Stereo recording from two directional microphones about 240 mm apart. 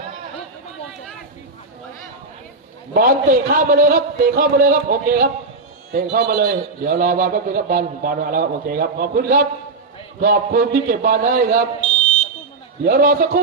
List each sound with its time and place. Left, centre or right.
2.9 s a man's voice: right
12.8 s a man's voice: right